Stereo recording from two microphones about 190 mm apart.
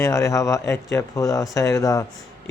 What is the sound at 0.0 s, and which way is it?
Speech, 15° left (ahead or behind).